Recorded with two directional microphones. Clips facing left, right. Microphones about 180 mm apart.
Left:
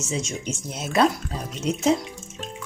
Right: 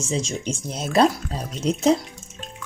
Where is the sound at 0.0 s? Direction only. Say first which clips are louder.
Right 3 dB; 30° right (ahead or behind).